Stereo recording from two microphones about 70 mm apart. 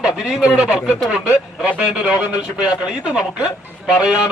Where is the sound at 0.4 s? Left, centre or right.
Centre.